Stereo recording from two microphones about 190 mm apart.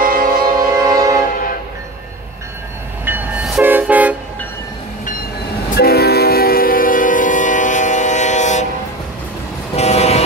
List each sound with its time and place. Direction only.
0.0 s music: 50° right (ahead or behind)
0.3 s music: 20° right (ahead or behind)
3.1 s train: 10° right (ahead or behind)
5.8 s train: 55° left (ahead or behind); by 8.6 s 40° left (ahead or behind)
9.8 s vehicle: 35° left (ahead or behind)